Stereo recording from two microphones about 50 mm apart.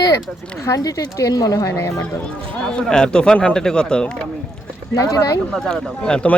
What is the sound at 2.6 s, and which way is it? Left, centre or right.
A man's voice, centre.